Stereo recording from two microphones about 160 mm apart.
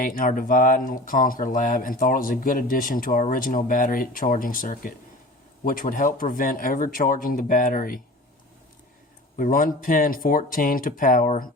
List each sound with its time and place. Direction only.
0.0 s speech: 60° left (ahead or behind)
9.4 s speech: 60° left (ahead or behind)